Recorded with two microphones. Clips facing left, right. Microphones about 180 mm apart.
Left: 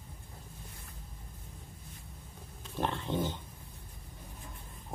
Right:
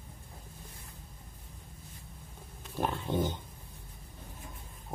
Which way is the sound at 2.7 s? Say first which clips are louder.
Right 2 dB; 10° right (ahead or behind).